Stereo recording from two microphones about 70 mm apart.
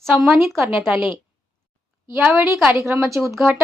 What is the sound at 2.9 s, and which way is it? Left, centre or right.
Speech, right.